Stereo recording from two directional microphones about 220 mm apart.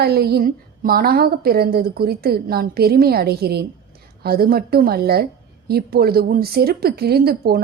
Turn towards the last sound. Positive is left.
turn(degrees=-45)  # may be behind; listen again after turning